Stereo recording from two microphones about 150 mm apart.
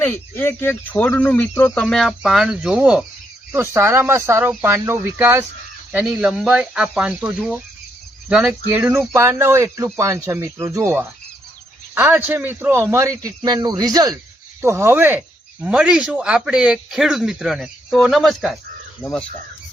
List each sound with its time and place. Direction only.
0.0 s speech: 15° left (ahead or behind); by 3.0 s 5° right (ahead or behind)
3.5 s speech: 15° right (ahead or behind); by 19.2 s 5° left (ahead or behind)